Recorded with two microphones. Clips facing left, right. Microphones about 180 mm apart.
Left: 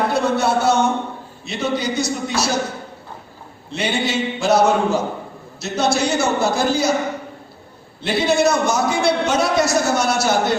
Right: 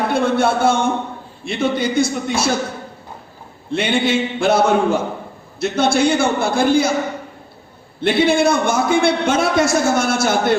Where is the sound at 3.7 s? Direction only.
55° right (ahead or behind).